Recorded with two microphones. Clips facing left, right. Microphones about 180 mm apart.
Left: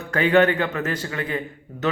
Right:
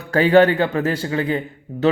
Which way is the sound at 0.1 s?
35° right (ahead or behind).